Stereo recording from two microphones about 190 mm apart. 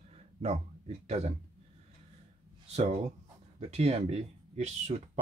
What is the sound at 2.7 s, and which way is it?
Speech, 35° right (ahead or behind).